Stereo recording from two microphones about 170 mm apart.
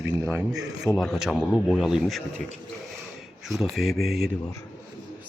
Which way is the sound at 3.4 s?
Centre (ahead or behind).